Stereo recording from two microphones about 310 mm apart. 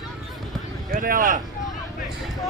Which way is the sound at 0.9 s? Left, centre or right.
Right.